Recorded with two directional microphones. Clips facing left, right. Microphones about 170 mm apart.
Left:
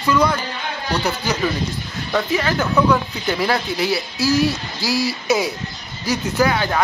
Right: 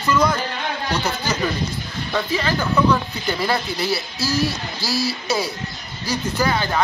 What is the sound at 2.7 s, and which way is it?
Speech, centre (ahead or behind).